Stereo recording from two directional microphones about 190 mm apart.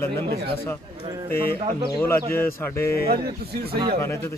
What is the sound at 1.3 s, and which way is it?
Speech, 55° left (ahead or behind).